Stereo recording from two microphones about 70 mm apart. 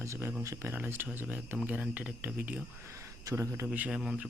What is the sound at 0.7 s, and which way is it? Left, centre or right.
Speech, right.